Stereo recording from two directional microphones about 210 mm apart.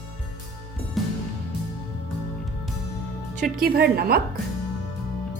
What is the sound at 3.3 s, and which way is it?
Speech, 40° right (ahead or behind).